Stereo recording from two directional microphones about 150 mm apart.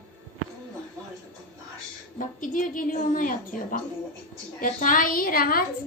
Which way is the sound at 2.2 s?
60° left (ahead or behind).